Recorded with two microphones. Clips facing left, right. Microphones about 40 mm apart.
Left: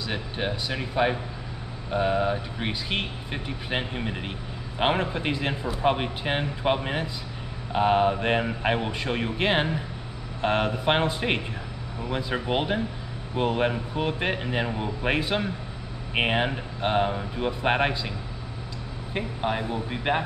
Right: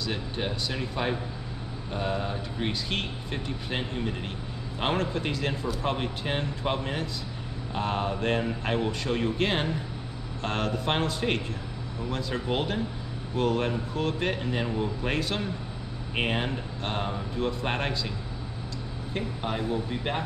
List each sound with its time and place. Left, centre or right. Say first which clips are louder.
0.0 s speech: left 2 dB; centre
19.1 s speech: left 4 dB; centre